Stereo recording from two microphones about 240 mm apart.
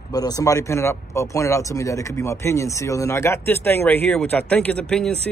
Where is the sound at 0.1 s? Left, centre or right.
Centre.